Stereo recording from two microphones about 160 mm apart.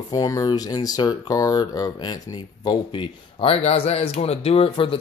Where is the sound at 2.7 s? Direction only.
35° left (ahead or behind).